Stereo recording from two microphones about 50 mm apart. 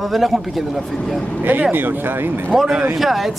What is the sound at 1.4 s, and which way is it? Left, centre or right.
Speech, right.